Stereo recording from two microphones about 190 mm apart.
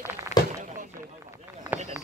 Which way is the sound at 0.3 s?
35° left (ahead or behind).